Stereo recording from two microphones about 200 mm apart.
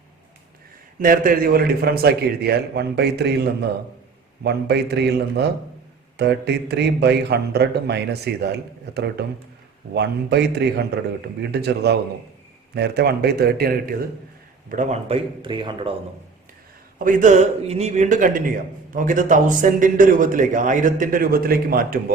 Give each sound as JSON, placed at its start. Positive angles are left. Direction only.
{"t": 0.9, "sound": "a man's voice", "side_deg": -45}
{"t": 4.4, "sound": "a man's voice", "side_deg": -55}
{"t": 14.7, "sound": "a man's voice", "side_deg": -35}
{"t": 17.0, "sound": "a man's voice", "side_deg": -40}